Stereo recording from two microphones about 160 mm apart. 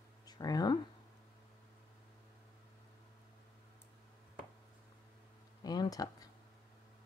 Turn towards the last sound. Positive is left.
turn(degrees=25)  # may be behind; listen again after turning